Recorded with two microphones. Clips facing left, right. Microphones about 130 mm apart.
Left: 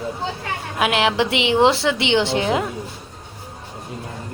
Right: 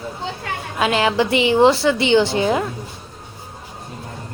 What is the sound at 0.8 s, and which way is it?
Speech, 5° left (ahead or behind).